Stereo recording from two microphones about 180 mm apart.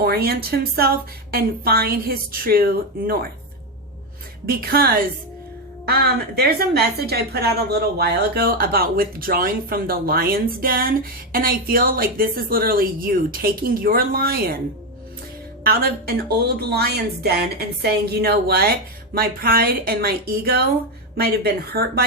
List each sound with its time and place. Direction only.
0.0 s a woman's voice: 60° right (ahead or behind)
4.4 s a woman's voice: 55° right (ahead or behind)
15.6 s a woman's voice: 60° right (ahead or behind)